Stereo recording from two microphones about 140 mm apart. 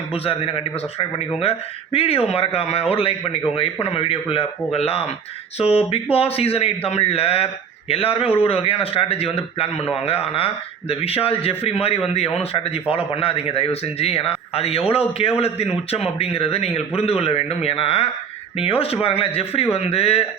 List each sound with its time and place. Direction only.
0.3 s speech: 40° left (ahead or behind)